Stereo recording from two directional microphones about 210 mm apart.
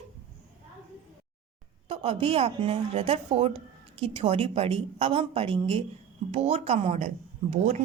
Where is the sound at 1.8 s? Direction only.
30° right (ahead or behind).